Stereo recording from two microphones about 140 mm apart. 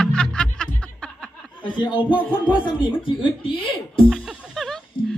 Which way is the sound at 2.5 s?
35° left (ahead or behind).